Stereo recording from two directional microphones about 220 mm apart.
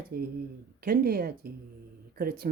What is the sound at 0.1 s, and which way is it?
Speech, 45° right (ahead or behind).